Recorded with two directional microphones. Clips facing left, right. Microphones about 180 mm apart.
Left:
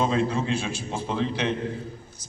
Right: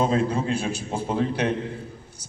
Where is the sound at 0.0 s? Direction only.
40° right (ahead or behind).